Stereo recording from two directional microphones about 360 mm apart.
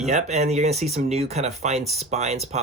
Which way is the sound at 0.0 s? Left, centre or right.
Centre.